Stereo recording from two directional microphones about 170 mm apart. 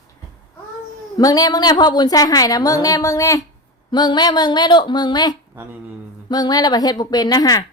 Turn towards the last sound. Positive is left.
turn(degrees=20)  # may be behind; listen again after turning